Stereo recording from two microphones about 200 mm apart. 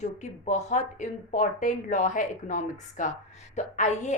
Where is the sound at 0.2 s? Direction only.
35° left (ahead or behind).